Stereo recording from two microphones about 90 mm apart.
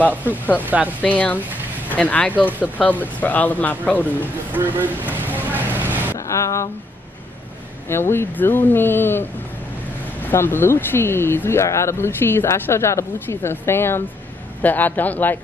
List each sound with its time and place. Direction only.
0.6 s speech: 20° right (ahead or behind)
1.0 s speech: 15° left (ahead or behind)
4.5 s speech: 20° right (ahead or behind)
5.1 s a sound: 20° right (ahead or behind)
6.1 s a sound: 35° left (ahead or behind)
7.9 s speech: 25° left (ahead or behind)